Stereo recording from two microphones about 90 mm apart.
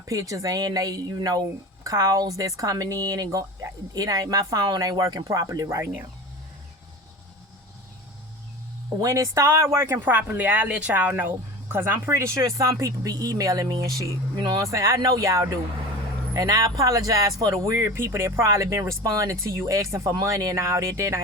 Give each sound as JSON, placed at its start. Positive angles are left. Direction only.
{"t": 0.0, "sound": "speech", "side_deg": -35}
{"t": 9.0, "sound": "speech", "side_deg": -35}